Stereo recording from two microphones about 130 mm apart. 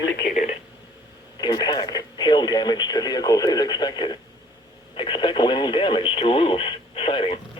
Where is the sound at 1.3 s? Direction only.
30° left (ahead or behind).